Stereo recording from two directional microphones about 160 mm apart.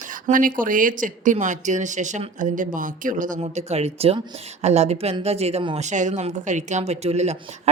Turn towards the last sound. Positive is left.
turn(degrees=-45)  # may be behind; listen again after turning